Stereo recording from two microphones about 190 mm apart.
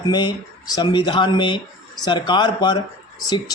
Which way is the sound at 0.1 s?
20° left (ahead or behind).